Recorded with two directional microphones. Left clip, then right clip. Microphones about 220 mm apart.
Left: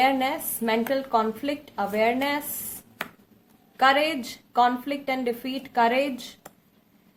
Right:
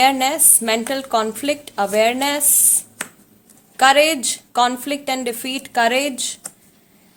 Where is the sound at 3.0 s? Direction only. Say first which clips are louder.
Right 4 dB; 5° left (ahead or behind).